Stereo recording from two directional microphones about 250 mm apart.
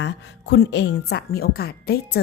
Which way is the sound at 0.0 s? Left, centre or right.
Left.